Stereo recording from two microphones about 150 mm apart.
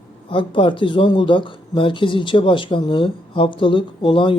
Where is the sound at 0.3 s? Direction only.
35° left (ahead or behind).